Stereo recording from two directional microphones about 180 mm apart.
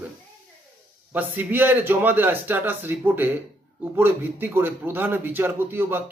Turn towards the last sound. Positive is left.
turn(degrees=-10)  # may be behind; listen again after turning